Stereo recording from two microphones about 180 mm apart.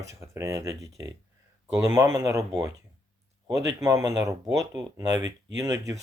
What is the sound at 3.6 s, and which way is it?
Speech, 15° right (ahead or behind).